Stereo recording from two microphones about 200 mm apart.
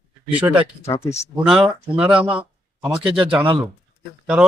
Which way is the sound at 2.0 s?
5° right (ahead or behind).